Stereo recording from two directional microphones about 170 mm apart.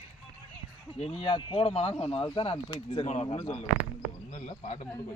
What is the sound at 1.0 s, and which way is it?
Speech, 30° left (ahead or behind).